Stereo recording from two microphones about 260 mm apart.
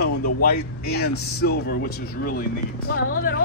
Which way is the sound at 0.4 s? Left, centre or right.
Left.